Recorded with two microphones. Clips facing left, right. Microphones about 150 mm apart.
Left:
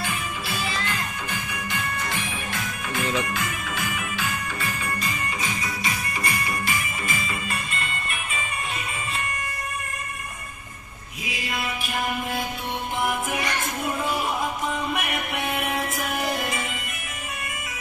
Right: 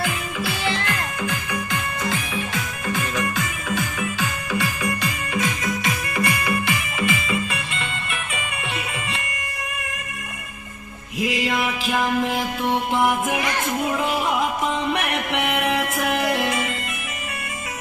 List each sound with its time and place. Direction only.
5.4 s music: 60° right (ahead or behind); by 8.2 s 75° right (ahead or behind)
11.2 s music: 90° right
12.9 s music: 70° right (ahead or behind)